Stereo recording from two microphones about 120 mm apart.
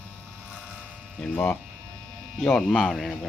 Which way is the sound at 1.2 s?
10° left (ahead or behind).